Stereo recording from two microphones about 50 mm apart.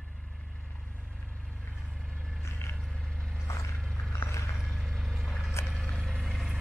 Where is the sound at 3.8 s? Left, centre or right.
Centre.